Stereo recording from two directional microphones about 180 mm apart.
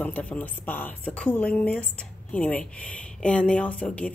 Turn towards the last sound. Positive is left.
turn(degrees=5)  # may be behind; listen again after turning